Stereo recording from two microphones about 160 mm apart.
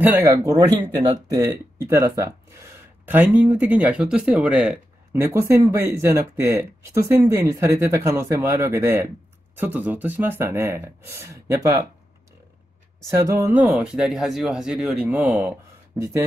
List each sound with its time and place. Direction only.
0.0 s speech: 15° right (ahead or behind)
5.2 s speech: 20° right (ahead or behind)
13.1 s speech: 20° right (ahead or behind)